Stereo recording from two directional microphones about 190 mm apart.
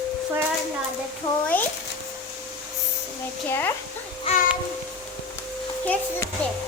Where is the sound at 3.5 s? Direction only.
10° left (ahead or behind).